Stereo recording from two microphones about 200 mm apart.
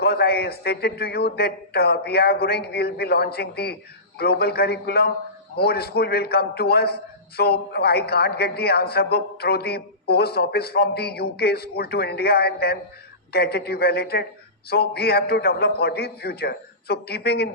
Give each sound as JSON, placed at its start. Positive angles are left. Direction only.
{"t": 0.0, "sound": "a man's voice", "side_deg": 50}